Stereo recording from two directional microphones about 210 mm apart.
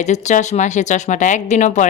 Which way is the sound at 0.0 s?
35° left (ahead or behind).